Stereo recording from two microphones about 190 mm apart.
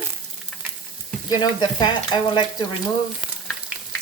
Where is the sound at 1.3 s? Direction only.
20° left (ahead or behind).